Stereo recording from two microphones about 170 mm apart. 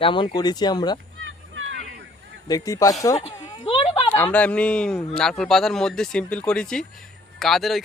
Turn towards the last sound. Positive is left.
turn(degrees=0)  # may be behind; listen again after turning